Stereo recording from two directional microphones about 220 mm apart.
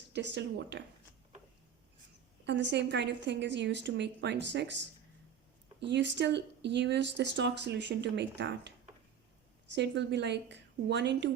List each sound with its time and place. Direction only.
0.1 s speech: 50° right (ahead or behind)
2.5 s speech: 50° right (ahead or behind)